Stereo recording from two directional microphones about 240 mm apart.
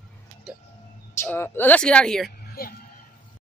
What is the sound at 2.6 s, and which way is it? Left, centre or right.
Speech, left.